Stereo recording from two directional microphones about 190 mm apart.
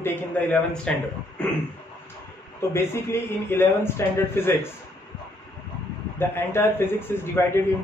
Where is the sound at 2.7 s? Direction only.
15° left (ahead or behind).